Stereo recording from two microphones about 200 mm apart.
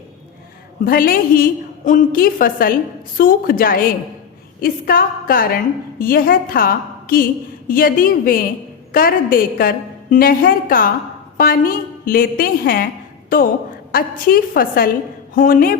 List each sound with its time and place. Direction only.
0.9 s a woman's voice: 45° left (ahead or behind)